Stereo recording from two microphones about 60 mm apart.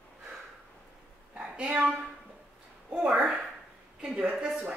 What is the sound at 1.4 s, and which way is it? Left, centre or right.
Speech, centre.